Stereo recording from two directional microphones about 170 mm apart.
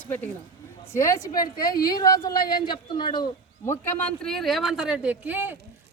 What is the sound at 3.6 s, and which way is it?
Speech, 10° left (ahead or behind).